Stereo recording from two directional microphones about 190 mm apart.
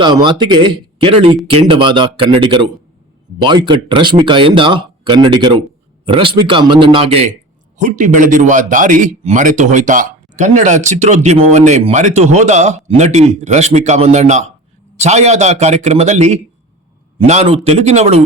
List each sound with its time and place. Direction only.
0.0 s a man's voice: 25° right (ahead or behind)